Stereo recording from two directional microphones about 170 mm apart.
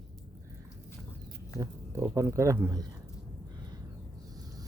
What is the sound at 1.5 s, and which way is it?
Speech, 15° right (ahead or behind).